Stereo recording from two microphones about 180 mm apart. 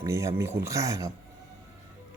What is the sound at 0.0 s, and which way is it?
Speech, 15° right (ahead or behind).